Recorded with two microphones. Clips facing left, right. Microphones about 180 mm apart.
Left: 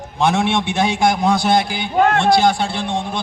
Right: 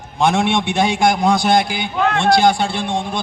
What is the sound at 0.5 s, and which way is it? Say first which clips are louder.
Speech: right 1 dB; 5° left (ahead or behind).